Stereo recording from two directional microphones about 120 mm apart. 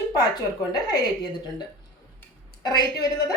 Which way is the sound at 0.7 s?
35° left (ahead or behind).